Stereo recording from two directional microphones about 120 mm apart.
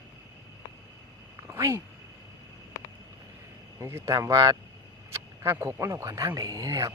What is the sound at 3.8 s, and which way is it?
Speech, 20° right (ahead or behind).